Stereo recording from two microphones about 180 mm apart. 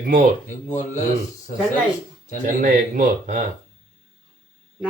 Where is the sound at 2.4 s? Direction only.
45° right (ahead or behind).